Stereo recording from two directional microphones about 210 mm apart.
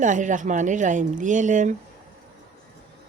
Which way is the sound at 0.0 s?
35° right (ahead or behind).